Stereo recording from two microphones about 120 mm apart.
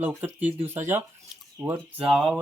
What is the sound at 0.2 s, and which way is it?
Speech, 15° right (ahead or behind).